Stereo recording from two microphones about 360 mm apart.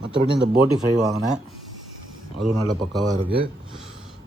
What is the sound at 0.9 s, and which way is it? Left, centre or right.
Speech, centre.